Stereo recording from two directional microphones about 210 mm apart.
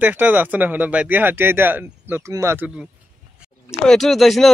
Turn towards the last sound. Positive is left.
turn(degrees=0)  # may be behind; listen again after turning